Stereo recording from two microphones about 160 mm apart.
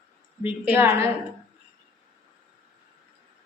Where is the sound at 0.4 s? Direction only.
10° right (ahead or behind).